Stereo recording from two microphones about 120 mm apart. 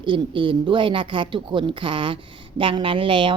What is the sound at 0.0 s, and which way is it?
A woman's voice, 45° right (ahead or behind).